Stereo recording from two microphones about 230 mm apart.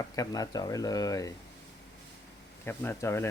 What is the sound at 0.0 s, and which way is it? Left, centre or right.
Speech, centre.